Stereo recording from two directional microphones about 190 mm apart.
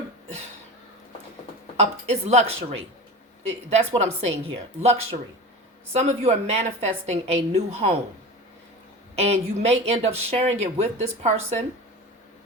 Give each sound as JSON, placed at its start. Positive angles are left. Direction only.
{"t": 1.7, "sound": "speech", "side_deg": -35}
{"t": 9.1, "sound": "speech", "side_deg": -35}